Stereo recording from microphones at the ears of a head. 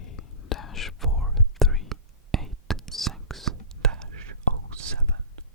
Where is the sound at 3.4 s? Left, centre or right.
Right.